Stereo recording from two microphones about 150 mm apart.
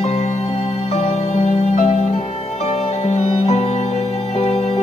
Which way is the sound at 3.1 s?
50° left (ahead or behind).